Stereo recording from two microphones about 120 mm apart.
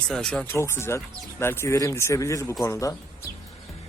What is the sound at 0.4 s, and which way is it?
Speech, 20° left (ahead or behind).